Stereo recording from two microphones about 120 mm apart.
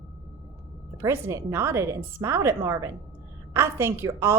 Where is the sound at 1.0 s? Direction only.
25° right (ahead or behind).